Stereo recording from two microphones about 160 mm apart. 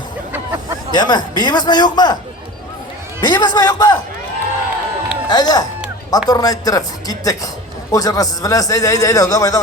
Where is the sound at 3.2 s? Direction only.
25° left (ahead or behind).